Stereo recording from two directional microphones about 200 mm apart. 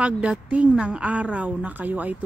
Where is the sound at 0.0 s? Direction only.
5° right (ahead or behind).